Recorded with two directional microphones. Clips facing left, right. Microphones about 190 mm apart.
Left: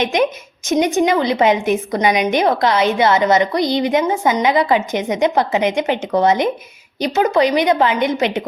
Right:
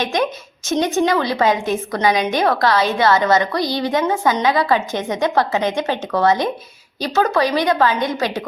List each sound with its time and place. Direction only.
0.0 s a woman's voice: 20° left (ahead or behind)